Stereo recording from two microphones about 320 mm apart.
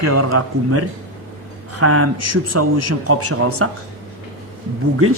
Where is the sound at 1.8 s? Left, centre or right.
Right.